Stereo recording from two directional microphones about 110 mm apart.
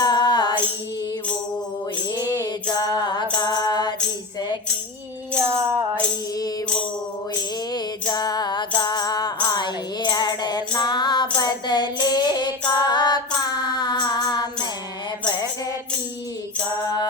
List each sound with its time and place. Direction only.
0.0 s music: 40° left (ahead or behind)
2.1 s music: 35° left (ahead or behind)
5.4 s music: 25° right (ahead or behind)
7.7 s music: 40° left (ahead or behind)
11.3 s female singing: 40° left (ahead or behind)